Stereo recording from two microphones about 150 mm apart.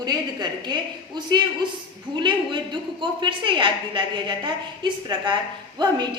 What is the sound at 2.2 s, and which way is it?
A woman's voice, 30° right (ahead or behind).